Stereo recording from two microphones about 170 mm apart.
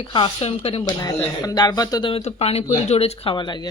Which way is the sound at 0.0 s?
30° left (ahead or behind).